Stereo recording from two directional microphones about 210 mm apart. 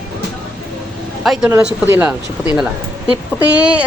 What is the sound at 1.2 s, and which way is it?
Speech, centre (ahead or behind).